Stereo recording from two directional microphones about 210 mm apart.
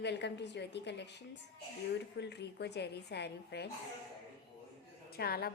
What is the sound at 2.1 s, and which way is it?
A woman's voice, 50° left (ahead or behind).